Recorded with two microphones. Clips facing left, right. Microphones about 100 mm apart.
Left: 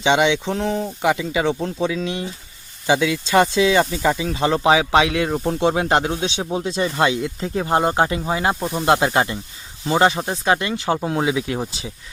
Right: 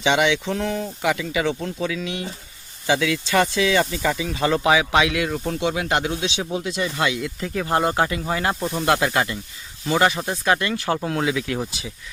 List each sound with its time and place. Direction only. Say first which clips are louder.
0.0 s speech: left 2 dB; 25° left (ahead or behind)